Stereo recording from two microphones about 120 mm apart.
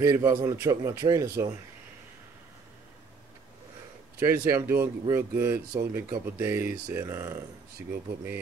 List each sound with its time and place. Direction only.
0.0 s speech: 25° right (ahead or behind)
4.2 s speech: 25° right (ahead or behind)